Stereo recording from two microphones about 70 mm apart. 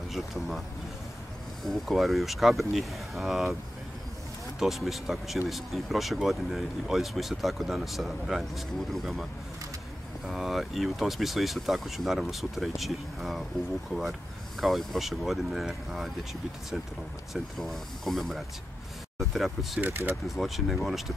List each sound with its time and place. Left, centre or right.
0.1 s speech: centre
1.6 s speech: centre
4.6 s speech: centre
10.2 s speech: centre
14.6 s speech: centre
17.3 s speech: centre
19.8 s speech: right
20.2 s speech: centre